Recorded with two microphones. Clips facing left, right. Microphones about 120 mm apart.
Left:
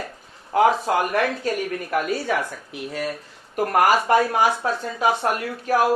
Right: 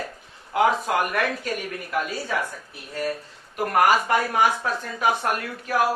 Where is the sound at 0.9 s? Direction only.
30° left (ahead or behind).